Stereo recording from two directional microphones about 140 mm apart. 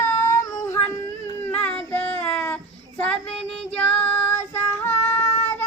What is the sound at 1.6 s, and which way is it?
Child singing, 10° left (ahead or behind).